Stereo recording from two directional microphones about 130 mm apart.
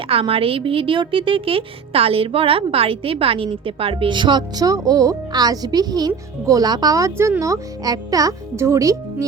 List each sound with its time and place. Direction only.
0.1 s a woman's voice: 45° right (ahead or behind); by 9.2 s 25° right (ahead or behind)